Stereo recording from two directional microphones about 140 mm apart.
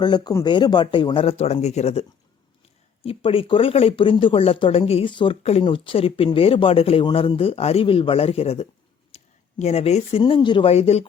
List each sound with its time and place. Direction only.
0.0 s speech: 30° left (ahead or behind)
10.7 s speech: 50° left (ahead or behind)